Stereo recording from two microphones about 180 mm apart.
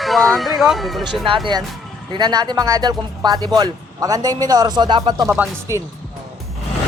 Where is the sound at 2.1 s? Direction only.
25° right (ahead or behind).